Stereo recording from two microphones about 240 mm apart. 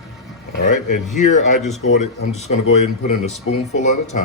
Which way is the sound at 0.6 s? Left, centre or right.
Left.